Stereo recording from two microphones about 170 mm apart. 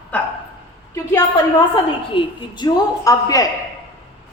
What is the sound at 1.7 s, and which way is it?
A woman's voice, 25° left (ahead or behind).